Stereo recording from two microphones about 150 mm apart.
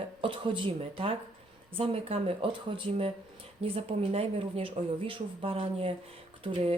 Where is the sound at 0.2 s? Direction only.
35° right (ahead or behind).